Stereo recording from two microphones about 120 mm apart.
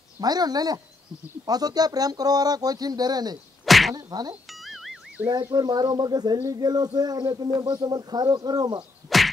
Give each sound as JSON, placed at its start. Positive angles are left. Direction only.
{"t": 0.2, "sound": "speech", "side_deg": -35}
{"t": 3.6, "sound": "a sound", "side_deg": 0}
{"t": 3.9, "sound": "speech", "side_deg": -35}
{"t": 4.5, "sound": "music", "side_deg": 0}
{"t": 5.2, "sound": "speech", "side_deg": -30}
{"t": 9.1, "sound": "whack", "side_deg": 0}